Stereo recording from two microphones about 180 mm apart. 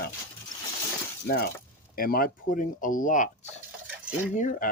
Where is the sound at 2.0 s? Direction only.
55° left (ahead or behind).